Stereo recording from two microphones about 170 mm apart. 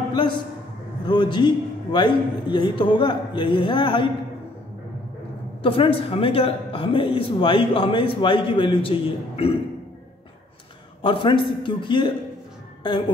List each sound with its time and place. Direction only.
0.1 s a man's voice: 30° left (ahead or behind)
5.6 s speech: 30° left (ahead or behind)
11.0 s a man's voice: 30° left (ahead or behind)